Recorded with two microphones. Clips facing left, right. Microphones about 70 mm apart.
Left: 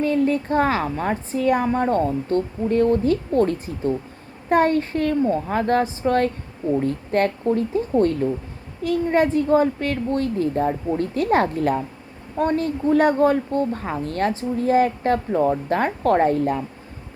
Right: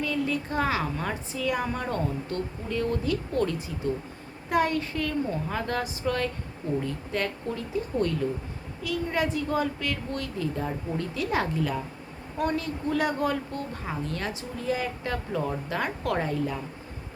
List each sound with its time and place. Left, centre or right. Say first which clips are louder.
0.0 s speech: left 9 dB; left